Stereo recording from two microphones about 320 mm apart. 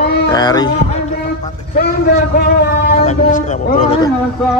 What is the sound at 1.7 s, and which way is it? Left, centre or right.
A man's voice, left.